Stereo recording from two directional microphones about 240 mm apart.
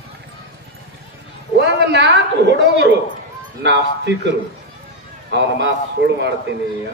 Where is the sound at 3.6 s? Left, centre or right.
Right.